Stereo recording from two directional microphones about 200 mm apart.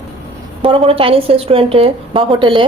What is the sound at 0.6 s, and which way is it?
A woman's voice, 25° right (ahead or behind).